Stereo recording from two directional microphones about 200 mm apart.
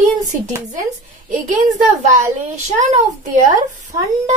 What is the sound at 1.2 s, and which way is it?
Speech, 40° right (ahead or behind).